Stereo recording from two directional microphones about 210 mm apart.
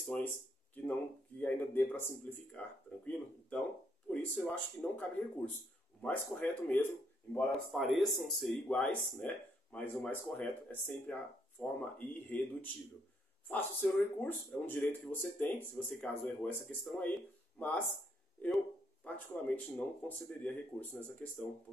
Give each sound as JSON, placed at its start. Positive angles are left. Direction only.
{"t": 0.0, "sound": "speech", "side_deg": 5}
{"t": 1.4, "sound": "speech", "side_deg": 10}
{"t": 4.1, "sound": "speech", "side_deg": 5}
{"t": 19.0, "sound": "speech", "side_deg": 5}